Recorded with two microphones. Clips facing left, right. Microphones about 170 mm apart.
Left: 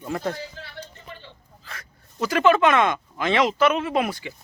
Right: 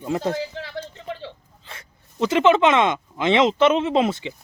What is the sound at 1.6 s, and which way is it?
Speech, 25° right (ahead or behind).